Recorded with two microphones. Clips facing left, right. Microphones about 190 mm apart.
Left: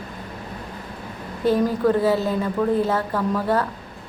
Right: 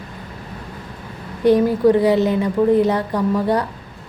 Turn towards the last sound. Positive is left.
turn(degrees=-15)  # may be behind; listen again after turning